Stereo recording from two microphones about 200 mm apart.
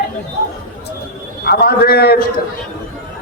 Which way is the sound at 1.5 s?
50° left (ahead or behind).